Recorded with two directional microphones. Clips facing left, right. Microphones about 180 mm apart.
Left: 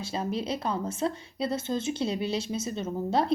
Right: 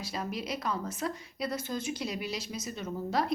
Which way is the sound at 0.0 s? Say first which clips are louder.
Left 5 dB; 30° left (ahead or behind).